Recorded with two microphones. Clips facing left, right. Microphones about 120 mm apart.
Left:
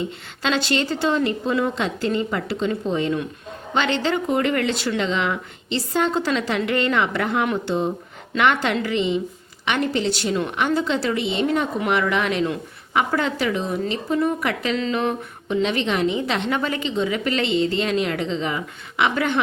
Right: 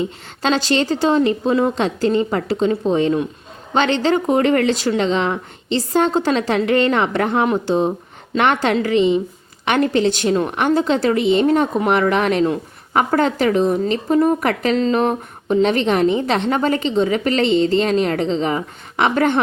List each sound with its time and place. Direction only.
0.4 s a woman's voice: 40° right (ahead or behind)